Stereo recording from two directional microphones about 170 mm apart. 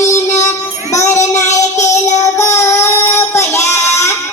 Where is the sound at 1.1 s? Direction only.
15° left (ahead or behind).